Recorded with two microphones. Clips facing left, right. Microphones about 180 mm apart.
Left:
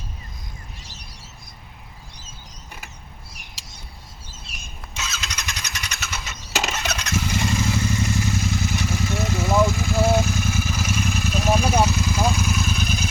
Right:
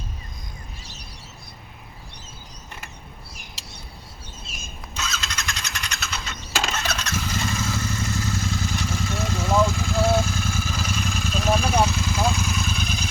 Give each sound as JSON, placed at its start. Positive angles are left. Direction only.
{"t": 4.5, "sound": "a sound", "side_deg": 65}
{"t": 4.9, "sound": "engine starting", "side_deg": 5}
{"t": 6.1, "sound": "vehicle", "side_deg": 5}